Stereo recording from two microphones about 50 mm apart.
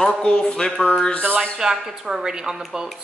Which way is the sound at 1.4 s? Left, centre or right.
Centre.